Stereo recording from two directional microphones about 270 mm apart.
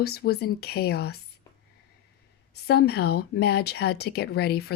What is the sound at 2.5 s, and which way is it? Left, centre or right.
A woman's voice, left.